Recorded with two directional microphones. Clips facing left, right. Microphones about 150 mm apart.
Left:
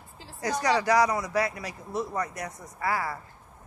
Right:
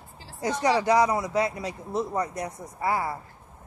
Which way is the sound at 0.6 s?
25° right (ahead or behind).